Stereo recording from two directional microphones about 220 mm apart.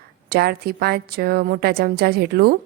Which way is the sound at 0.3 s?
45° right (ahead or behind).